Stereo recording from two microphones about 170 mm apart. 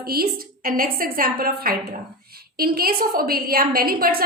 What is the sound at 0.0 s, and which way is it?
A woman's voice, 60° right (ahead or behind).